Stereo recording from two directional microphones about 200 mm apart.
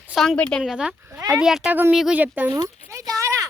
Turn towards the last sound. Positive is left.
turn(degrees=-15)  # may be behind; listen again after turning